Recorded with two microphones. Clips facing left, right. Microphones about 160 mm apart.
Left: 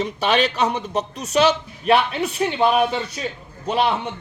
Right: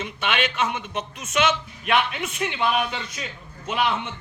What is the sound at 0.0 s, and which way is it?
A man's voice, 35° left (ahead or behind).